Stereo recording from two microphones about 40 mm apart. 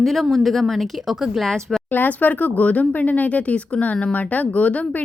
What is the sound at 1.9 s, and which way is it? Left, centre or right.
A woman's voice, left.